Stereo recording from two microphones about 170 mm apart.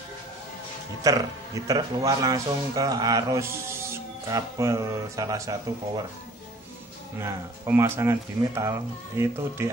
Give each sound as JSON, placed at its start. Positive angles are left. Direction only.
{"t": 1.0, "sound": "a man's voice", "side_deg": -20}
{"t": 7.2, "sound": "speech", "side_deg": -15}